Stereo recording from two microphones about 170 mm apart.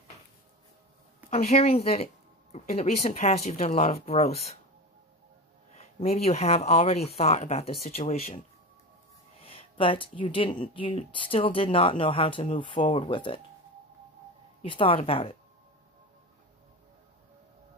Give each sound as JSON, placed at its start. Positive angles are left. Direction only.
{"t": 1.3, "sound": "speech", "side_deg": 40}
{"t": 5.8, "sound": "speech", "side_deg": 40}
{"t": 9.4, "sound": "speech", "side_deg": 35}
{"t": 14.6, "sound": "speech", "side_deg": 30}